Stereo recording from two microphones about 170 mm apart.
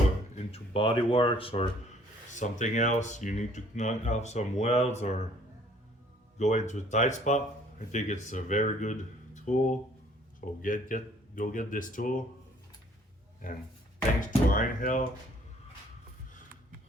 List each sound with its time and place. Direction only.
0.3 s speech: 35° left (ahead or behind)
2.3 s speech: 45° left (ahead or behind)
6.4 s speech: 45° left (ahead or behind)
14.2 s speech: 50° left (ahead or behind)